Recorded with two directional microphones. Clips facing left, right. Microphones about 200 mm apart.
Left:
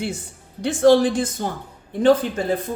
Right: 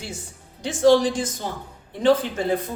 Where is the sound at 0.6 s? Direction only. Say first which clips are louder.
Left 2 dB; 60° left (ahead or behind).